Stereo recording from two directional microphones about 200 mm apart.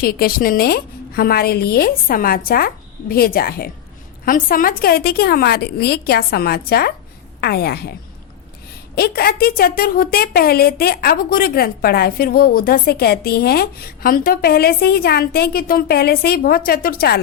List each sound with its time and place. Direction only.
0.0 s a woman's voice: 50° left (ahead or behind)
9.0 s a woman's voice: 50° left (ahead or behind)